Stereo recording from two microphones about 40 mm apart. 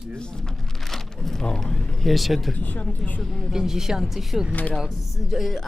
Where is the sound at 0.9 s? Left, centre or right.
Centre.